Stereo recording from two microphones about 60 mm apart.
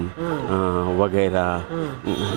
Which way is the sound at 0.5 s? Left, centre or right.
Right.